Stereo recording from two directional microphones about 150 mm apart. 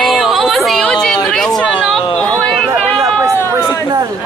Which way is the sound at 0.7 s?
5° left (ahead or behind).